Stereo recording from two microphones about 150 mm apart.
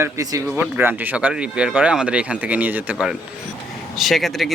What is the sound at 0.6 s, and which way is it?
Speech, 10° right (ahead or behind).